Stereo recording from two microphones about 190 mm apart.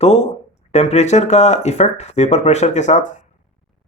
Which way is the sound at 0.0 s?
35° left (ahead or behind).